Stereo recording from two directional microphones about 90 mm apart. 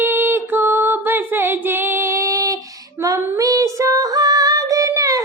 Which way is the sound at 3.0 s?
40° right (ahead or behind).